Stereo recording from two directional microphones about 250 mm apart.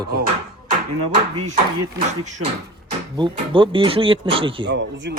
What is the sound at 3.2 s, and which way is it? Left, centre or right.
Speech, centre.